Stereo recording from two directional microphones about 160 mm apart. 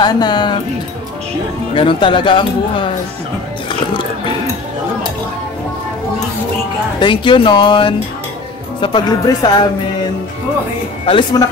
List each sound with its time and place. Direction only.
0.0 s speech: 25° left (ahead or behind)
1.8 s speech: 30° left (ahead or behind)
7.0 s speech: 30° left (ahead or behind)
11.1 s speech: 30° left (ahead or behind)